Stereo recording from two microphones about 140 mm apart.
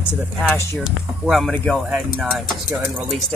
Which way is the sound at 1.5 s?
10° left (ahead or behind).